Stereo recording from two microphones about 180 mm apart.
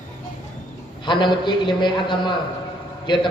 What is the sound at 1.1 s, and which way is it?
A man's voice, 25° left (ahead or behind).